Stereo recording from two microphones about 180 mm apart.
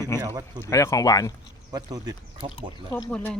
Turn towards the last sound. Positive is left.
turn(degrees=5)  # may be behind; listen again after turning